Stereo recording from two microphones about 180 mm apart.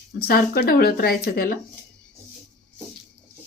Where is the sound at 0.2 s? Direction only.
55° left (ahead or behind).